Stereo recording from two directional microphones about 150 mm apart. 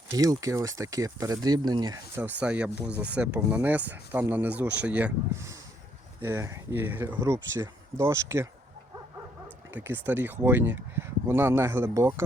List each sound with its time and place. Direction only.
0.1 s speech: 20° right (ahead or behind)
2.1 s speech: 10° right (ahead or behind)
7.2 s speech: 25° right (ahead or behind)
9.7 s speech: 10° right (ahead or behind)